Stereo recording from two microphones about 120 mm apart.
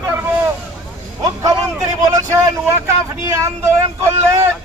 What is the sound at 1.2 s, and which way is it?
Speech, 30° right (ahead or behind).